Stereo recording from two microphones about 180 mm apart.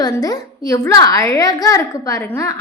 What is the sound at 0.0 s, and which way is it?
A woman's voice, 20° left (ahead or behind).